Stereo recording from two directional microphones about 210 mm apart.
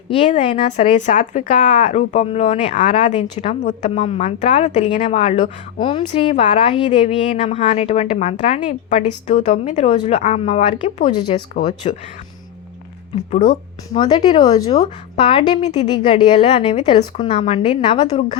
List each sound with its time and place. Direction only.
0.3 s a woman's voice: 30° left (ahead or behind)
13.9 s a woman's voice: 20° left (ahead or behind)